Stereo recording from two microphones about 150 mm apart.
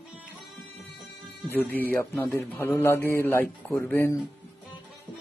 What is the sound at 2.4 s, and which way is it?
A man's voice, 15° left (ahead or behind).